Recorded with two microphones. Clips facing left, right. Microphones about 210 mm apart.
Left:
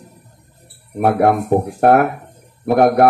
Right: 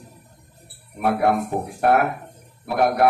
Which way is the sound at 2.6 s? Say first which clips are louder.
Left 7 dB; 50° left (ahead or behind).